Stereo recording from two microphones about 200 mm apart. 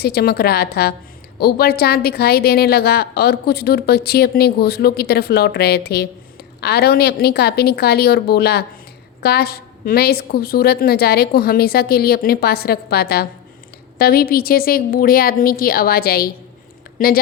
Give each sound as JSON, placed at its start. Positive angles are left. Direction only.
{"t": 0.0, "sound": "a woman's voice", "side_deg": 50}